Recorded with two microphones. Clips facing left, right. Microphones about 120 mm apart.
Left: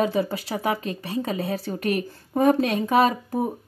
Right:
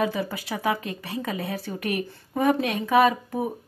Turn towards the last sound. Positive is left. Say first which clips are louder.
# even
turn(degrees=30)  # may be behind; listen again after turning